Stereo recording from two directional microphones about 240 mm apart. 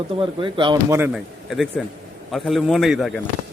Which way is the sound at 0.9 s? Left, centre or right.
Centre.